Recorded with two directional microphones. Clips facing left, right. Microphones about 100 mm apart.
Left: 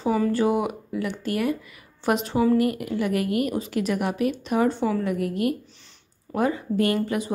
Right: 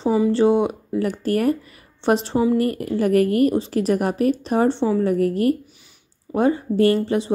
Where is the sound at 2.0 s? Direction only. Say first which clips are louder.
Right 3 dB; 30° right (ahead or behind).